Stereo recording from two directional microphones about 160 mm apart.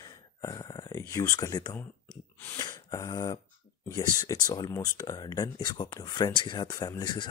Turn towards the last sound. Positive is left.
turn(degrees=25)  # may be behind; listen again after turning